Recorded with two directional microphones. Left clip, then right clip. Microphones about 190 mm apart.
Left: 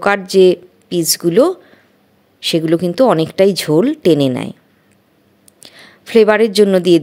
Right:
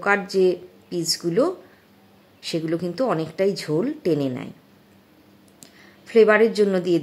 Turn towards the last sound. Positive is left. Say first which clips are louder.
# left 9 dB
turn(degrees=40)  # may be behind; listen again after turning